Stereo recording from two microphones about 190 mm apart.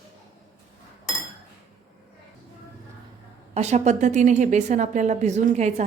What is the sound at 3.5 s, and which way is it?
A woman's voice, 35° right (ahead or behind).